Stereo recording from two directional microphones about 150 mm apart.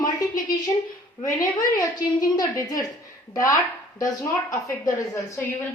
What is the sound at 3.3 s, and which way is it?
Speech, 20° left (ahead or behind).